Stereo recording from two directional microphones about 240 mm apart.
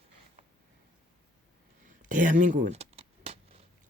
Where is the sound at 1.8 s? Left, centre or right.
Right.